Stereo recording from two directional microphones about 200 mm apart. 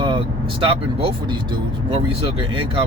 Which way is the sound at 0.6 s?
25° right (ahead or behind).